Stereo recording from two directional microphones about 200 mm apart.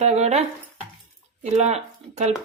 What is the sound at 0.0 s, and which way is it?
Speech, 35° right (ahead or behind).